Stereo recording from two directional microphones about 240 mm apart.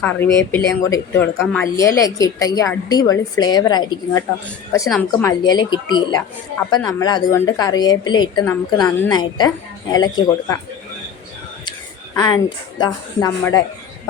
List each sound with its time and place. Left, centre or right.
0.0 s a woman's voice: centre
4.9 s a woman's voice: centre
5.4 s a woman's voice: centre
12.1 s a woman's voice: centre